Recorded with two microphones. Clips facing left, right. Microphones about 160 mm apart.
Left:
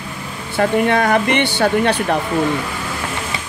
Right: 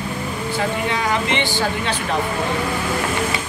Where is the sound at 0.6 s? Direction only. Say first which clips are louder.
Left 9 dB; 60° left (ahead or behind).